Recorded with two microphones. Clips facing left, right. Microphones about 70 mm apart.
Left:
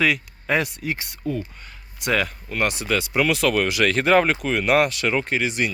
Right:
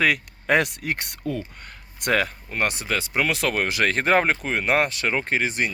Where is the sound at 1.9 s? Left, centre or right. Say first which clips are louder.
Even; right.